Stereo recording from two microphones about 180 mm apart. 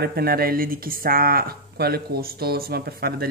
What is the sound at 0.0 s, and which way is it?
Speech, 60° right (ahead or behind).